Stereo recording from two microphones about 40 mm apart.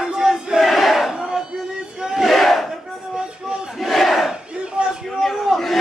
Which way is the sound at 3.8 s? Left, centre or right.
Centre.